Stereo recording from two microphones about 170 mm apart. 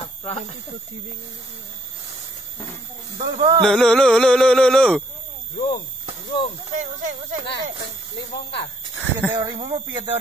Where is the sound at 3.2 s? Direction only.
25° right (ahead or behind).